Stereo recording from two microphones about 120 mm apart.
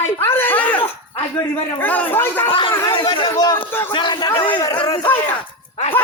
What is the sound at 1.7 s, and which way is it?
Speech, 15° left (ahead or behind).